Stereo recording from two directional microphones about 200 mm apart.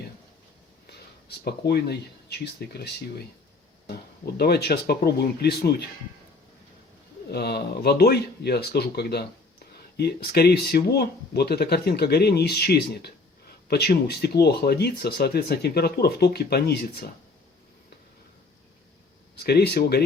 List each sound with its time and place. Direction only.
1.5 s speech: 55° left (ahead or behind)
7.3 s speech: 55° left (ahead or behind)
19.4 s speech: 55° left (ahead or behind)